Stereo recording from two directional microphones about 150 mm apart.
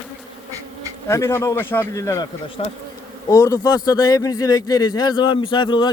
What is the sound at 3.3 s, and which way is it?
A man's voice, 20° left (ahead or behind).